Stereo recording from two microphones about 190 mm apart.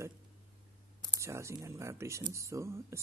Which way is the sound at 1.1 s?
15° right (ahead or behind).